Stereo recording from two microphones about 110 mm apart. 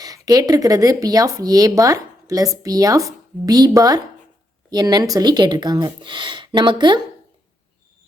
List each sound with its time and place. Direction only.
0.0 s speech: 35° right (ahead or behind)